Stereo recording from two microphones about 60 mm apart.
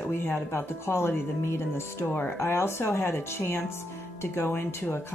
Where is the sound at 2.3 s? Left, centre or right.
Left.